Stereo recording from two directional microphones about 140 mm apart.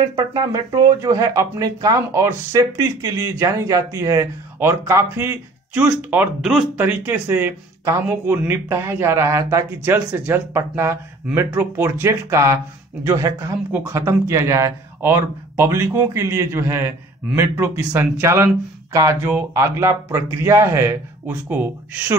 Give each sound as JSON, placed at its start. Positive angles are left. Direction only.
{"t": 0.0, "sound": "speech", "side_deg": -30}